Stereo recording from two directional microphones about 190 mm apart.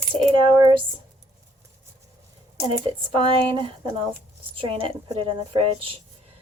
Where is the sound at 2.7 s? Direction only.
25° right (ahead or behind).